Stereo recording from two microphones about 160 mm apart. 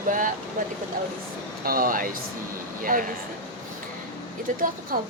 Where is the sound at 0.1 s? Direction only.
55° right (ahead or behind).